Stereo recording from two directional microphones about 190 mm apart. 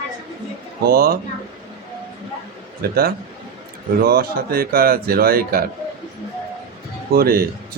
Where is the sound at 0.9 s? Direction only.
50° right (ahead or behind).